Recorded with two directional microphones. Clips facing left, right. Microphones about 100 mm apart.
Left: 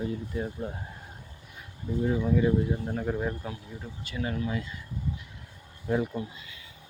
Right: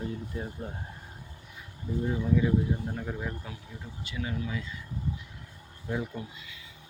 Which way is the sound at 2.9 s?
45° left (ahead or behind).